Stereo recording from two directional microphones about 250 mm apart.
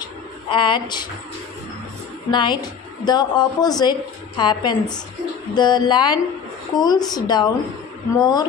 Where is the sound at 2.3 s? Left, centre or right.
Centre.